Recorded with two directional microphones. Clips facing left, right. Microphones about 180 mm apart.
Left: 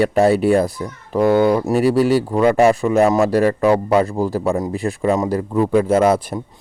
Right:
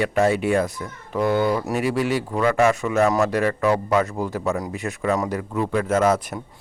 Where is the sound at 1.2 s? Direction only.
90° left.